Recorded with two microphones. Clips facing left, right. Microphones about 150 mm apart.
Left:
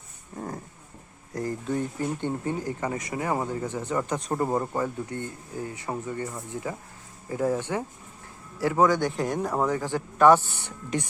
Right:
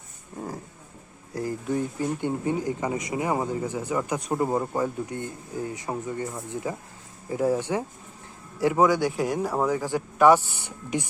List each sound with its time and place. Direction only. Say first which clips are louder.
0.3 s dog: even; 5° right (ahead or behind)
1.4 s speech: right 1 dB; 10° right (ahead or behind)